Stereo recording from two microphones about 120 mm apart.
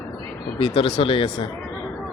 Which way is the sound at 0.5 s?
50° left (ahead or behind).